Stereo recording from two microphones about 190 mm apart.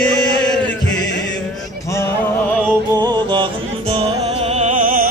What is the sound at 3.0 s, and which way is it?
Music, 25° right (ahead or behind).